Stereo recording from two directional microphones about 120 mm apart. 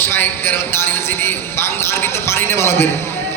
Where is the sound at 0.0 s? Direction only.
20° left (ahead or behind).